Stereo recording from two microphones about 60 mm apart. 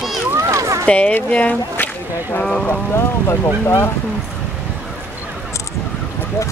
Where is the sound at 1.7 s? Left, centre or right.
Left.